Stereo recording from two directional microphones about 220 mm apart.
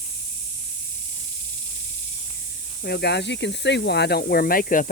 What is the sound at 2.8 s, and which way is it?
Speech, 50° left (ahead or behind).